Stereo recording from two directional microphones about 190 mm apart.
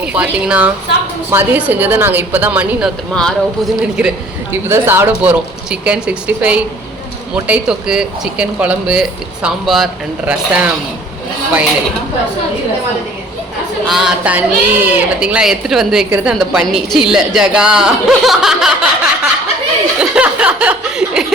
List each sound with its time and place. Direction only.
0.0 s a woman's voice: 5° right (ahead or behind)
3.2 s a man's voice: centre (ahead or behind)
13.8 s a man's voice: centre (ahead or behind)
20.0 s a sound: 5° right (ahead or behind)